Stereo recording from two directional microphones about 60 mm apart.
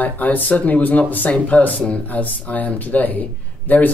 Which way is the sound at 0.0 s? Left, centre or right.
Left.